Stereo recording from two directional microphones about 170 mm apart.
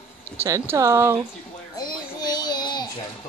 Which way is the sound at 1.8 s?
25° left (ahead or behind).